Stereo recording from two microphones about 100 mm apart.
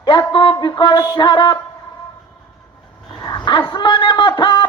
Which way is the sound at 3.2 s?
45° left (ahead or behind).